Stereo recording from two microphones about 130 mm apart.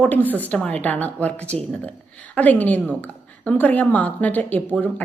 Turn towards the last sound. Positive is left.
turn(degrees=15)  # may be behind; listen again after turning